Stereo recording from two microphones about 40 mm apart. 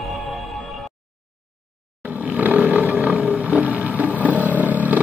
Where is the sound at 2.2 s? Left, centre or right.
Right.